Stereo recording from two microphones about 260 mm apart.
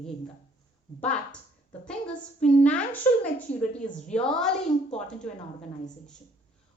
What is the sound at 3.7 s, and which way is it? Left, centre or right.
Speech, left.